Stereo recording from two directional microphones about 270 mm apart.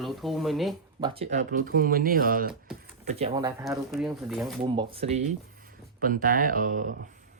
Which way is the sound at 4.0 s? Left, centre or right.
Centre.